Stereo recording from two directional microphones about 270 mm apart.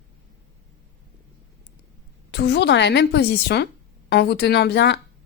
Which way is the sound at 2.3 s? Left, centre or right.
Left.